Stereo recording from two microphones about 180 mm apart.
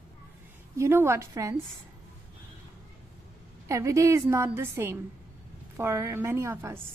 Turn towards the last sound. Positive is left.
turn(degrees=-15)  # may be behind; listen again after turning